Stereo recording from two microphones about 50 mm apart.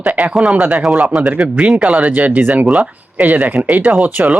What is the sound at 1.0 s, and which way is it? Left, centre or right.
Speech, centre.